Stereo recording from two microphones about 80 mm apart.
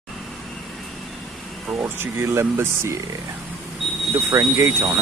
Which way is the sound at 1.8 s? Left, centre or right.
Right.